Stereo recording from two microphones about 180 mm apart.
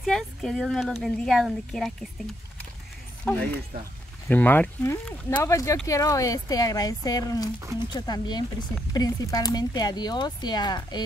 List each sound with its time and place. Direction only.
0.0 s speech: centre (ahead or behind)
3.3 s speech: 10° left (ahead or behind)